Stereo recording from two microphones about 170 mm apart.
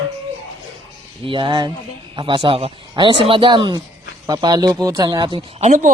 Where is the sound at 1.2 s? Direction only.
30° right (ahead or behind).